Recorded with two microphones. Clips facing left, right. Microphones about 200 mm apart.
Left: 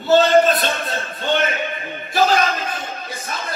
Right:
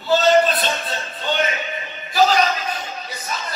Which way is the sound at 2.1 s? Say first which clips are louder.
Even; 50° left (ahead or behind).